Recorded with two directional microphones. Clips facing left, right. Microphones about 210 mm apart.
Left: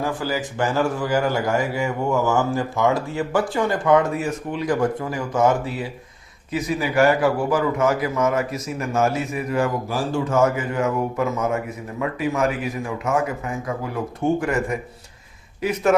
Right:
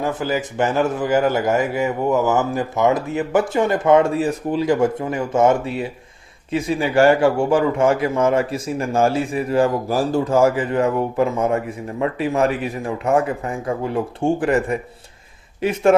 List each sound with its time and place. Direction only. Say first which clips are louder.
0.0 s a man's voice: right 3 dB; 20° right (ahead or behind)